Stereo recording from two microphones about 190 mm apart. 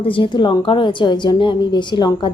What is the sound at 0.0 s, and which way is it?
A woman's voice, 25° left (ahead or behind).